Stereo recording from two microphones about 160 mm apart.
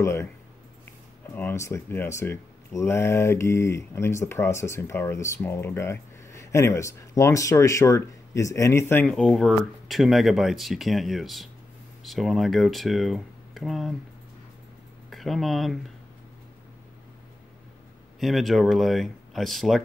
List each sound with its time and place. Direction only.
0.0 s speech: 15° left (ahead or behind)
1.3 s speech: 15° left (ahead or behind)
9.1 s speech: centre (ahead or behind)
15.0 s speech: centre (ahead or behind)
18.2 s speech: centre (ahead or behind)